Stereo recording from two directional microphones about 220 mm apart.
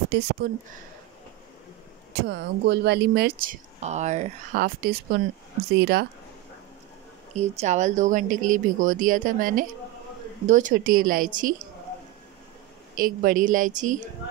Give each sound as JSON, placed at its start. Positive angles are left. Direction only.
{"t": 0.1, "sound": "speech", "side_deg": -50}
{"t": 2.1, "sound": "speech", "side_deg": -50}
{"t": 7.3, "sound": "speech", "side_deg": -30}
{"t": 12.9, "sound": "speech", "side_deg": -40}